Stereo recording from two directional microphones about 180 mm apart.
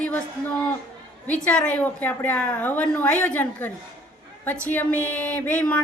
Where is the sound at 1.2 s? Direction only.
5° left (ahead or behind).